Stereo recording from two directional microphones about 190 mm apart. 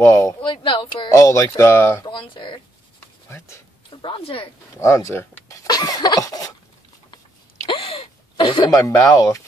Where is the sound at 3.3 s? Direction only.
15° left (ahead or behind).